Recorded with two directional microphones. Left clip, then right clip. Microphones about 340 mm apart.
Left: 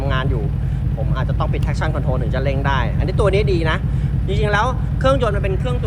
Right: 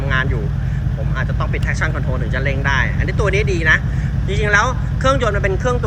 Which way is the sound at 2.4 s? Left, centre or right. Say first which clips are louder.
Right 4 dB; centre.